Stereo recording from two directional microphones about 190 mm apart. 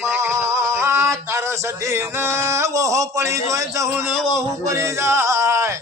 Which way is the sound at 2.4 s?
15° right (ahead or behind).